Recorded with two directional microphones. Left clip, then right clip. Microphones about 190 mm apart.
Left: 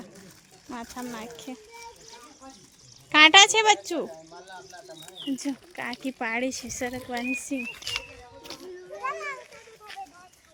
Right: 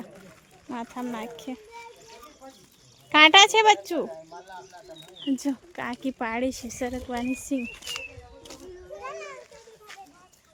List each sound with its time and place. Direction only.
0.7 s speech: 20° right (ahead or behind)
3.1 s speech: 15° right (ahead or behind)
5.4 s speech: 20° right (ahead or behind)
9.0 s children playing: 25° left (ahead or behind)
9.9 s a sound: centre (ahead or behind)